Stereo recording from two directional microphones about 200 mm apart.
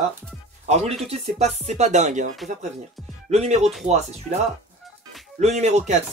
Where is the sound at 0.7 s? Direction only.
35° right (ahead or behind).